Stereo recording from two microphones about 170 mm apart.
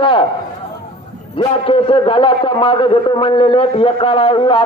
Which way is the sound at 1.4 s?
30° left (ahead or behind).